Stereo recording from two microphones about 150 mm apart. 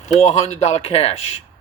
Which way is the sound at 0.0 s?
45° left (ahead or behind).